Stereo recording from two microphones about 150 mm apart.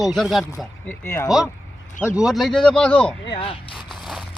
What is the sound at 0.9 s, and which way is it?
Speech, 15° left (ahead or behind).